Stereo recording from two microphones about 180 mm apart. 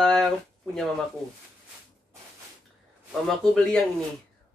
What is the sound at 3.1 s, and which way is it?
Speech, centre (ahead or behind).